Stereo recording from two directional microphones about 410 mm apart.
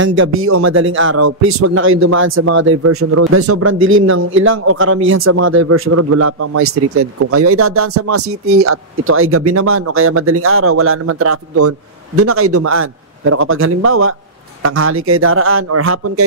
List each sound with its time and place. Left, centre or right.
0.0 s speech: right